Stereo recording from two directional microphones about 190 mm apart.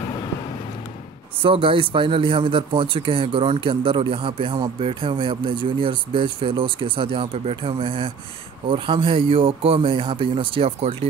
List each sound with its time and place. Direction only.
1.4 s a man's voice: 30° right (ahead or behind)